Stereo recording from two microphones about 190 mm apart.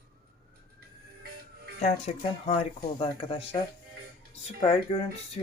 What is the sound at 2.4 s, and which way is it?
Speech, 30° left (ahead or behind).